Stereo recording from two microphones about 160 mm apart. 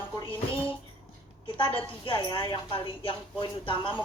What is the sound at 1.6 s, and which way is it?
A woman's voice, 35° left (ahead or behind).